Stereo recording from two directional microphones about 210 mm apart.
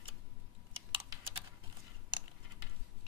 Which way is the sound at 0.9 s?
25° right (ahead or behind).